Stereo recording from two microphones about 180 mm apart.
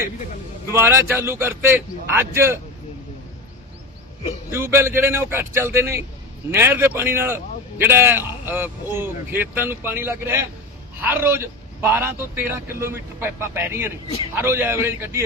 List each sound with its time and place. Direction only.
0.7 s a man's voice: 15° right (ahead or behind)
4.5 s a man's voice: 15° right (ahead or behind)